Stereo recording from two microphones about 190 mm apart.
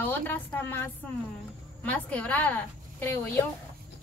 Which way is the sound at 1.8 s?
10° left (ahead or behind).